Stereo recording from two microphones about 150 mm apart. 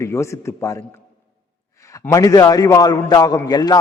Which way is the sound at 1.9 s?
20° left (ahead or behind).